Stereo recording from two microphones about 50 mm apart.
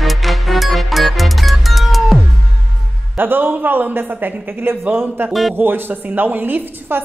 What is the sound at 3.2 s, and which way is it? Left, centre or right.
A woman's voice, right.